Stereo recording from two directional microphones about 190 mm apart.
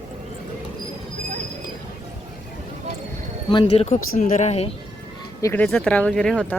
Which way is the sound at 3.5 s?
30° left (ahead or behind).